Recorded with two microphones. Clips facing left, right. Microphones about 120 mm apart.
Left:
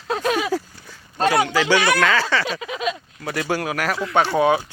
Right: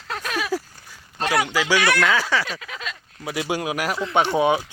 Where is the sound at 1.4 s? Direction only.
10° right (ahead or behind).